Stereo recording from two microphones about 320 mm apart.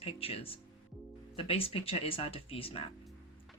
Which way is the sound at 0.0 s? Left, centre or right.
Centre.